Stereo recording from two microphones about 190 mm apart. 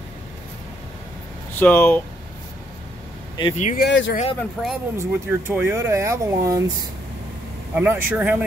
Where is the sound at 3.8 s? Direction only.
75° left (ahead or behind).